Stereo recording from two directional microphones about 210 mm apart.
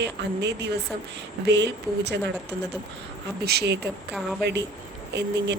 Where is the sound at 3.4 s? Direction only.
50° right (ahead or behind).